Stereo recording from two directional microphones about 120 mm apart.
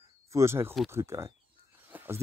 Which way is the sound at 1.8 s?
15° right (ahead or behind).